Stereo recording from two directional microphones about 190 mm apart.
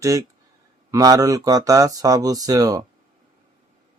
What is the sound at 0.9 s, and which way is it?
Speech, 20° right (ahead or behind).